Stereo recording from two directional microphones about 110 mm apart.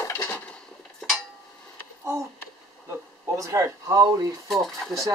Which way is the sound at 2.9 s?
30° right (ahead or behind).